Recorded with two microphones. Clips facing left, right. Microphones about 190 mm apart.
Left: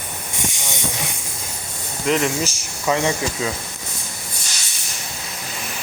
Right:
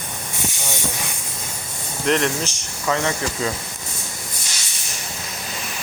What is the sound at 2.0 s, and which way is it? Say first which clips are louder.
Speech: even; 5° left (ahead or behind).